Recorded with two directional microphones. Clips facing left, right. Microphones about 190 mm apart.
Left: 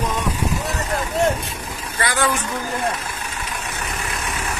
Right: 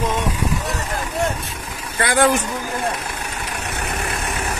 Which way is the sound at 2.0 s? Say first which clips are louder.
Right 5 dB; 55° right (ahead or behind).